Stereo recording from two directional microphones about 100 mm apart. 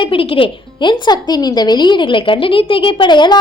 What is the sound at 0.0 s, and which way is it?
A woman's voice, 65° left (ahead or behind).